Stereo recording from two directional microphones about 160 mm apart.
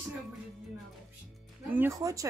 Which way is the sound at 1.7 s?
10° right (ahead or behind).